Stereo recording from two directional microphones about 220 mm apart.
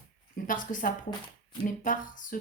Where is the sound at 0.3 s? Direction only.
35° left (ahead or behind).